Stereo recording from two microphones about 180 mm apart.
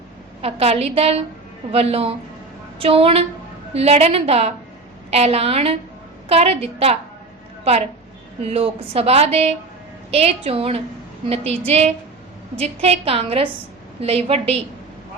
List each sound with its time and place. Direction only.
0.4 s a woman's voice: 35° right (ahead or behind)